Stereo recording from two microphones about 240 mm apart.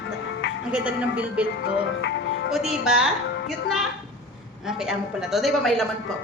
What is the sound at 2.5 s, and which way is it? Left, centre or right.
Speech, centre.